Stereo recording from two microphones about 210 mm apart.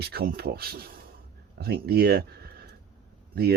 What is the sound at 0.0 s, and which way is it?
Speech, 50° right (ahead or behind).